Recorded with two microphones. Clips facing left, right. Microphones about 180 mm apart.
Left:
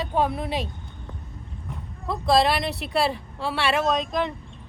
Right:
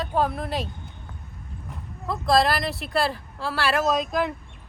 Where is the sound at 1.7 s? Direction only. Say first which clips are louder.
Left 1 dB; centre (ahead or behind).